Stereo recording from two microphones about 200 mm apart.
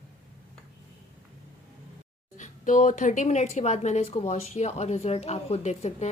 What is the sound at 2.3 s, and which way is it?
Speech, 40° left (ahead or behind).